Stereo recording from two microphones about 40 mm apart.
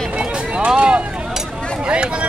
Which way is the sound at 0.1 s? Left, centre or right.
Right.